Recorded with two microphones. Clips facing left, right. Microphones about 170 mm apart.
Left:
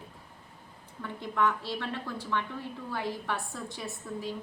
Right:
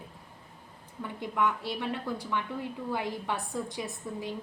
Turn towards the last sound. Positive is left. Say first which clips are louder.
# right 1 dB
turn(degrees=-15)  # may be behind; listen again after turning